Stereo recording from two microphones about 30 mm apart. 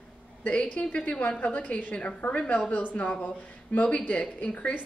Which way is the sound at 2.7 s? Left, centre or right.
Left.